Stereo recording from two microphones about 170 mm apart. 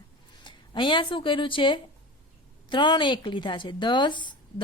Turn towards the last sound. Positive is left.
turn(degrees=25)  # may be behind; listen again after turning